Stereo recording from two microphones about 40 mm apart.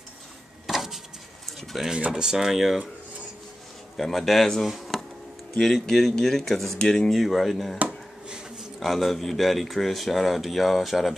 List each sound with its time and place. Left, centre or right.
0.7 s a sound: centre
1.8 s speech: centre
3.9 s speech: centre
4.6 s a sound: centre
5.6 s speech: centre
6.8 s speech: centre
7.1 s speech: centre